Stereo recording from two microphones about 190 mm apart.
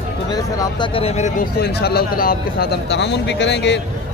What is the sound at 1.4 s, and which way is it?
Speech, 55° left (ahead or behind).